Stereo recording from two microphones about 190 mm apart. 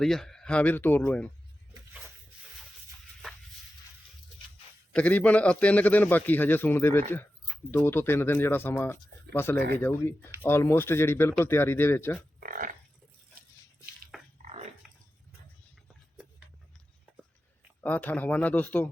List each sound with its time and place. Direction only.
0.0 s a man's voice: centre (ahead or behind)
4.9 s a man's voice: 5° left (ahead or behind)
12.4 s a sound: 45° right (ahead or behind)
14.4 s dog: 35° right (ahead or behind)
17.8 s a man's voice: 10° left (ahead or behind)